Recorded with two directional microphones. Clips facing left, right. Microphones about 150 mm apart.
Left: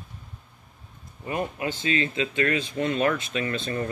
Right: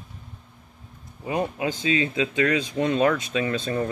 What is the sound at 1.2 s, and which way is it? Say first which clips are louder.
Speech: right 3 dB; 15° right (ahead or behind).